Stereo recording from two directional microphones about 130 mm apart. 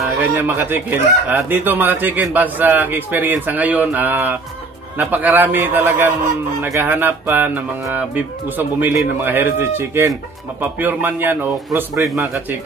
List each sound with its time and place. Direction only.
0.2 s music: 15° right (ahead or behind)
9.2 s speech: 15° right (ahead or behind)
10.6 s music: 15° right (ahead or behind)